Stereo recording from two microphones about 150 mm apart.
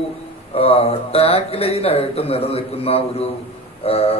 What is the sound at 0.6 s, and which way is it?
A man's voice, 40° left (ahead or behind).